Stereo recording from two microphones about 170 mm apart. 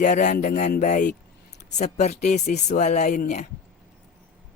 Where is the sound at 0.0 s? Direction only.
45° left (ahead or behind).